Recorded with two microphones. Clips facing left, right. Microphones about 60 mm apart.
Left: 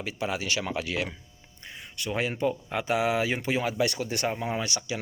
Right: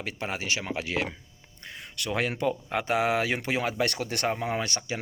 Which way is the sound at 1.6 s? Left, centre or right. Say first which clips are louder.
Right 1 dB; right.